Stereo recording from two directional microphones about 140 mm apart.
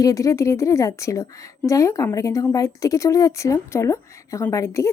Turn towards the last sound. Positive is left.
turn(degrees=20)  # may be behind; listen again after turning